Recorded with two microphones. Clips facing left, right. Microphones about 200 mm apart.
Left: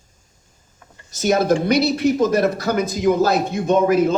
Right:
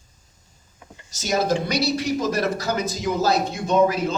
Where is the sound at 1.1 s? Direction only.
55° left (ahead or behind).